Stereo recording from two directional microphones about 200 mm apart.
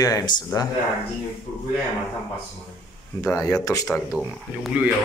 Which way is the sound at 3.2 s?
15° left (ahead or behind).